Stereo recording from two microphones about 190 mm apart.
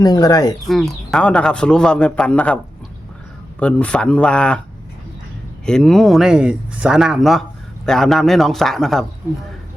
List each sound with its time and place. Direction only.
0.0 s speech: 20° left (ahead or behind)
0.7 s a man's voice: centre (ahead or behind)
3.6 s a man's voice: 5° left (ahead or behind)
5.6 s a man's voice: 5° left (ahead or behind)